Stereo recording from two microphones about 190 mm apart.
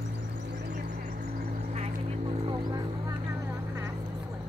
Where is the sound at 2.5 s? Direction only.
20° right (ahead or behind).